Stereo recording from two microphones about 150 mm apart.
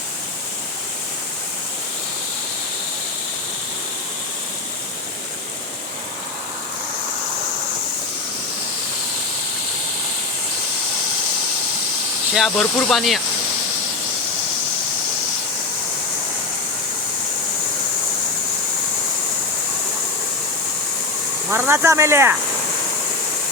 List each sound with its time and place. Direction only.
12.3 s speech: centre (ahead or behind)
21.5 s speech: 15° right (ahead or behind)